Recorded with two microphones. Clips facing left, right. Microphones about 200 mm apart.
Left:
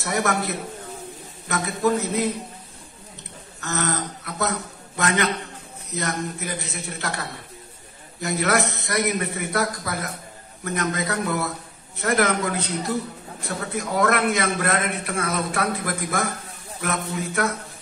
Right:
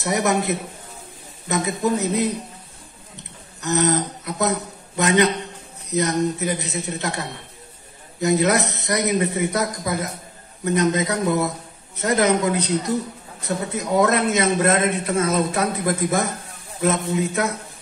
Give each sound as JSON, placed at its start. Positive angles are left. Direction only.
{"t": 0.0, "sound": "a man's voice", "side_deg": -20}
{"t": 3.6, "sound": "a man's voice", "side_deg": -20}